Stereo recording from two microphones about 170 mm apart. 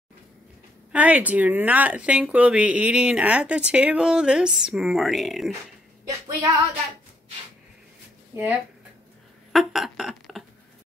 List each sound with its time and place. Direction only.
0.9 s speech: 10° right (ahead or behind)
6.0 s a woman's voice: 20° right (ahead or behind)
8.3 s speech: 15° right (ahead or behind)
9.5 s a sound: centre (ahead or behind)